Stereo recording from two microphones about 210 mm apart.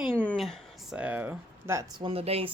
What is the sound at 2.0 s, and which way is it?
Speech, 25° right (ahead or behind).